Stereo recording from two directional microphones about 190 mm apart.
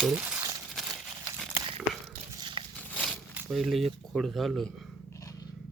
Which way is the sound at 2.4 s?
25° right (ahead or behind).